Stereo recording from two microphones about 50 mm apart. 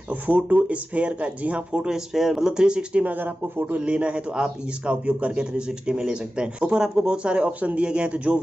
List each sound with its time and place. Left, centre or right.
0.1 s a man's voice: right
1.9 s speech: centre
3.0 s speech: right
3.8 s a man's voice: right